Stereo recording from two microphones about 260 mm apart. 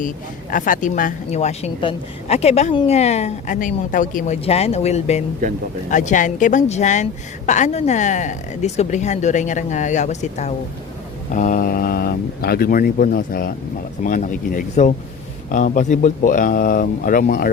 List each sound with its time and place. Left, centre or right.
0.5 s a woman's voice: left